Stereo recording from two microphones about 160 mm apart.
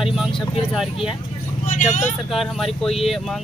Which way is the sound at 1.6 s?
55° left (ahead or behind).